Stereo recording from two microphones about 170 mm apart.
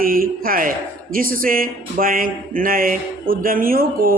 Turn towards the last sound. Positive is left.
turn(degrees=-60)  # may be behind; listen again after turning